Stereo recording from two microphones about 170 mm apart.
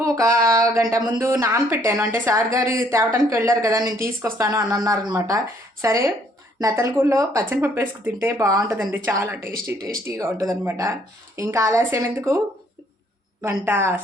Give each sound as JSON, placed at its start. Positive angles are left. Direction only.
{"t": 0.0, "sound": "a sound", "side_deg": -20}
{"t": 1.1, "sound": "speech", "side_deg": -20}
{"t": 13.4, "sound": "speech", "side_deg": -15}